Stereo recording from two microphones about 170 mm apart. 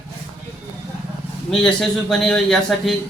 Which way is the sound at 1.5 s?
5° left (ahead or behind).